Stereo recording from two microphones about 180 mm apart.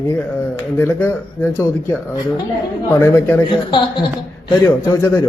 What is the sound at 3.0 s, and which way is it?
Speech, 15° left (ahead or behind).